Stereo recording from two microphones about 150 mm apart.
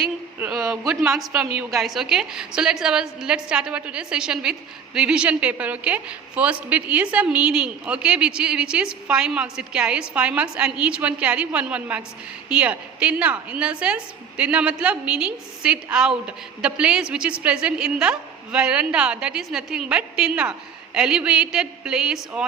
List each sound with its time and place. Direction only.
0.0 s a woman's voice: 5° right (ahead or behind)